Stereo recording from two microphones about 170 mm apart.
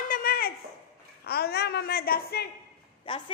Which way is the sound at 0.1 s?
60° left (ahead or behind).